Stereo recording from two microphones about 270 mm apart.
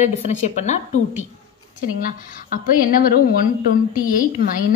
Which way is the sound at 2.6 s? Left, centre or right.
Left.